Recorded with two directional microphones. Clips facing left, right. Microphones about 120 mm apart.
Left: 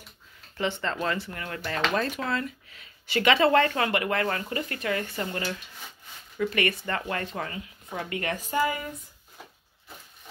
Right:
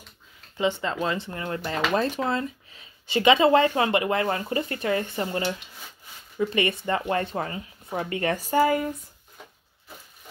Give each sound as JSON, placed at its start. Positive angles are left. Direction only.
{"t": 0.6, "sound": "speech", "side_deg": -15}